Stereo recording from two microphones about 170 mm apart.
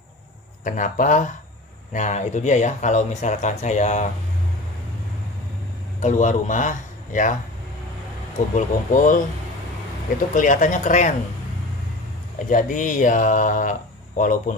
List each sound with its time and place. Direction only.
0.7 s speech: 50° left (ahead or behind)
5.9 s speech: 45° left (ahead or behind)
8.5 s speech: 50° left (ahead or behind)
10.3 s speech: 50° left (ahead or behind)
12.4 s speech: 50° left (ahead or behind)